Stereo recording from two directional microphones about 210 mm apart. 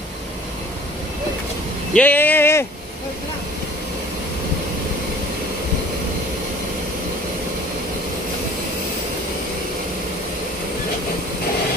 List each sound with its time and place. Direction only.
2.0 s speech: 10° left (ahead or behind)